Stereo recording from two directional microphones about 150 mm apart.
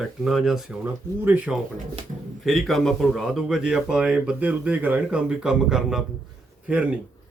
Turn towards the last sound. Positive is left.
turn(degrees=-10)  # may be behind; listen again after turning